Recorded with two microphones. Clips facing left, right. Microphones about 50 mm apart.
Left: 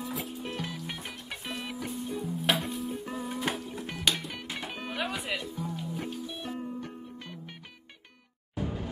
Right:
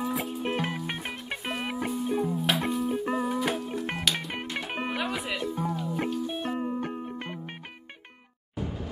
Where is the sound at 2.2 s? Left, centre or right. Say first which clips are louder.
Right 3 dB; centre.